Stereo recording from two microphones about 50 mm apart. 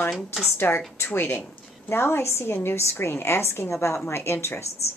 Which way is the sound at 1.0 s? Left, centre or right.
Left.